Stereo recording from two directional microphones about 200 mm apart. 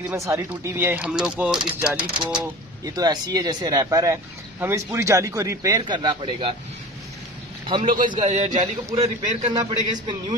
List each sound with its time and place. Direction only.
0.0 s speech: 15° right (ahead or behind)
2.8 s speech: 20° right (ahead or behind)
7.6 s a man's voice: 25° right (ahead or behind)